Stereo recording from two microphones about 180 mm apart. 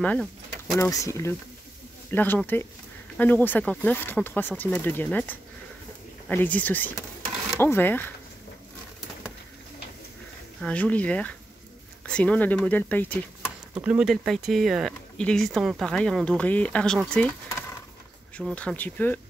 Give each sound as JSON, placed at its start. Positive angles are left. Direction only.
{"t": 0.0, "sound": "speech", "side_deg": 5}
{"t": 0.7, "sound": "speech", "side_deg": 15}
{"t": 10.6, "sound": "speech", "side_deg": 5}
{"t": 13.7, "sound": "speech", "side_deg": -5}